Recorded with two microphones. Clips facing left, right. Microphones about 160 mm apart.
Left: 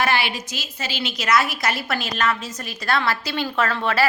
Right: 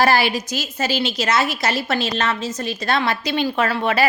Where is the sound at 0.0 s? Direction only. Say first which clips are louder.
Right 5 dB; 40° right (ahead or behind).